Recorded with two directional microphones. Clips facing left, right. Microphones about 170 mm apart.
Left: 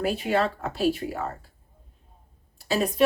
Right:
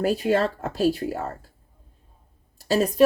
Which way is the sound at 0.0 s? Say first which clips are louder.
Right 3 dB; 40° right (ahead or behind).